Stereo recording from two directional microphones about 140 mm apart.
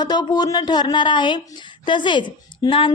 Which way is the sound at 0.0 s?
30° left (ahead or behind).